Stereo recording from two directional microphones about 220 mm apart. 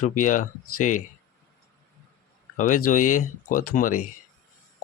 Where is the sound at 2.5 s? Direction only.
35° left (ahead or behind).